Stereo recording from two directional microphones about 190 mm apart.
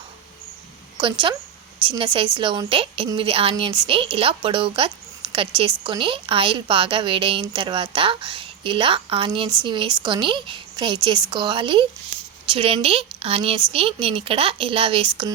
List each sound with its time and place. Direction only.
1.9 s a woman's voice: 25° right (ahead or behind)